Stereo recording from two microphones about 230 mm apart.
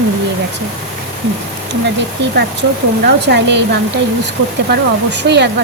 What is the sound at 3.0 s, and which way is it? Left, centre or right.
A woman's voice, right.